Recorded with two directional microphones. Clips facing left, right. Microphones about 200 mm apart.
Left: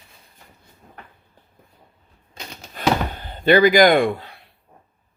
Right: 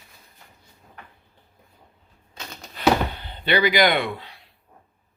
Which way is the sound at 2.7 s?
45° left (ahead or behind).